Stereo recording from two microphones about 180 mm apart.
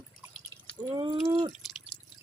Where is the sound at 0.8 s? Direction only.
25° right (ahead or behind).